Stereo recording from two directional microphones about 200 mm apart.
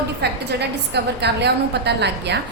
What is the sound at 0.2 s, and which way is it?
A woman's voice, 55° right (ahead or behind).